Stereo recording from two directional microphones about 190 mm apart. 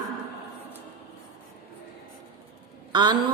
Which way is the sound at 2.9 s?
20° right (ahead or behind).